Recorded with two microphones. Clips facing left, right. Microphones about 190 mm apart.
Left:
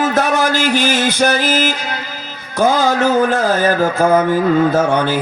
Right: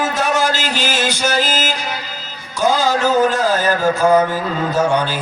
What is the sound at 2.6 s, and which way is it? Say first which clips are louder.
Mantra: left 2 dB; 60° left (ahead or behind).